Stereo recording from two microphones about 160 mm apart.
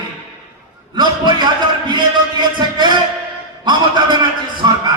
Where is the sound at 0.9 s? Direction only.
25° right (ahead or behind).